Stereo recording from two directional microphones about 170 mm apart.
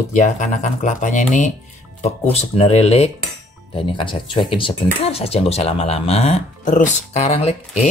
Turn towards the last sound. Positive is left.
turn(degrees=40)  # may be behind; listen again after turning